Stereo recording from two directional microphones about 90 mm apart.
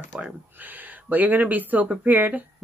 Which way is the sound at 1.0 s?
20° right (ahead or behind).